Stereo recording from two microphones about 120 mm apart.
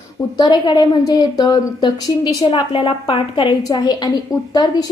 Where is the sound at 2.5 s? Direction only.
50° left (ahead or behind).